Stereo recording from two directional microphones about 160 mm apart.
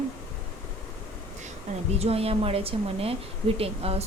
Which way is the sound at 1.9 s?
40° right (ahead or behind).